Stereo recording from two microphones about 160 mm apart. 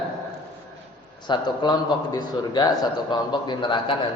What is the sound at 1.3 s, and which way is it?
A man's voice, 30° left (ahead or behind).